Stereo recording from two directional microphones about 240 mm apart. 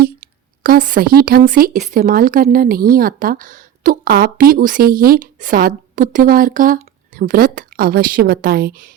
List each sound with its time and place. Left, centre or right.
0.0 s a woman's voice: right